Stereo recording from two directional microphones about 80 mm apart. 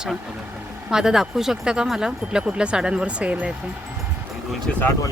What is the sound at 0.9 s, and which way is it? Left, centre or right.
Speech, centre.